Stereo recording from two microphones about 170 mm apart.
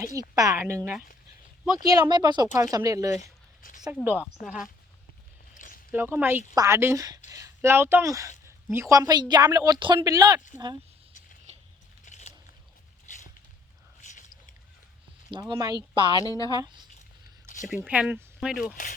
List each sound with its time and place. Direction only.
0.2 s speech: 20° right (ahead or behind)
3.2 s a sound: 55° left (ahead or behind)
4.0 s speech: 10° right (ahead or behind)
5.5 s a sound: 55° left (ahead or behind)
5.9 s speech: 10° right (ahead or behind)
12.0 s biting: 45° left (ahead or behind)
14.0 s a sound: 45° left (ahead or behind)
15.3 s speech: 25° right (ahead or behind)
16.2 s a woman's voice: 20° left (ahead or behind)
17.7 s speech: 10° right (ahead or behind)